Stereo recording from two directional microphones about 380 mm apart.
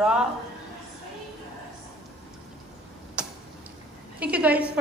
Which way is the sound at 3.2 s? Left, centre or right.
Centre.